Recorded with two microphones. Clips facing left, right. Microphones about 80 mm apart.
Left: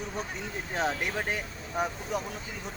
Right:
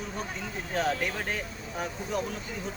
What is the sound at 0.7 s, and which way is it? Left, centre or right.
Speech, left.